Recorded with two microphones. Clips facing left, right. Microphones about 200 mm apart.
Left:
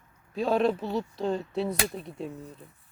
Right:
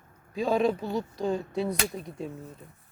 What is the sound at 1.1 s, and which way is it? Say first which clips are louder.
Speech: right 1 dB; 5° right (ahead or behind).